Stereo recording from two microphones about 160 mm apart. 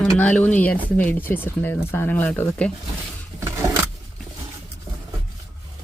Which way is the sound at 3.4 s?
20° right (ahead or behind).